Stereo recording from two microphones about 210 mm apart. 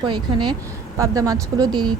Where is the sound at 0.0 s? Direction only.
20° right (ahead or behind).